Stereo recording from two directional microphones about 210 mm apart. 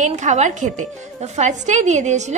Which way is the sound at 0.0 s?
35° right (ahead or behind).